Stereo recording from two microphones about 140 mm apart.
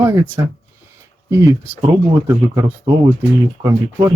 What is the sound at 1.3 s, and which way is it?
Speech, 25° right (ahead or behind).